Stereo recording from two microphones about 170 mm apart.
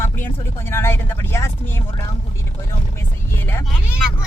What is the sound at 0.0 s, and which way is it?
Vehicle, 15° left (ahead or behind).